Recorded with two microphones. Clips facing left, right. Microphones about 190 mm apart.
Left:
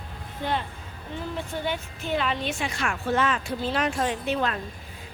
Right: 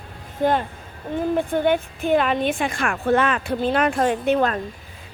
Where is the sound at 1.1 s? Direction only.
55° right (ahead or behind).